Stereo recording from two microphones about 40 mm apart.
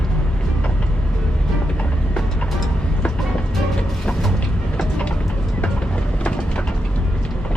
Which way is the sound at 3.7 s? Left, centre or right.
Centre.